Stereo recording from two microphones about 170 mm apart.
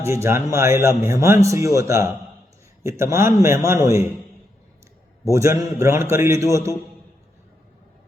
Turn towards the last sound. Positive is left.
turn(degrees=-20)  # may be behind; listen again after turning